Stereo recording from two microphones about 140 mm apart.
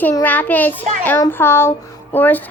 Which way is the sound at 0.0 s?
15° left (ahead or behind).